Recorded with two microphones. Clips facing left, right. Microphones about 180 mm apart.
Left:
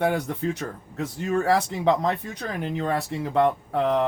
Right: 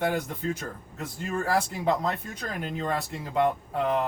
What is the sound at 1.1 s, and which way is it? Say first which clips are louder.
Speech: left 5 dB; 70° left (ahead or behind).